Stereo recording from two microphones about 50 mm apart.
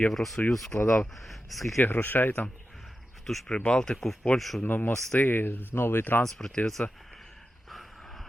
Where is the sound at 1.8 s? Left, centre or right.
Left.